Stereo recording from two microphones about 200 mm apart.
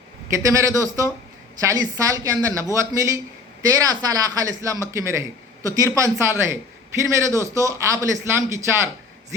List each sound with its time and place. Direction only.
0.3 s a man's voice: 15° right (ahead or behind)